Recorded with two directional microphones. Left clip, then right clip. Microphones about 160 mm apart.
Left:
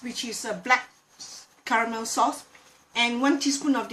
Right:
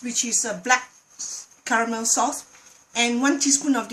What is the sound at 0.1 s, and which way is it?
A woman's voice, 90° right.